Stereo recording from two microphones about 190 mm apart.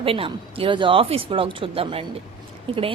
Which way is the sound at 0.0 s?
30° right (ahead or behind).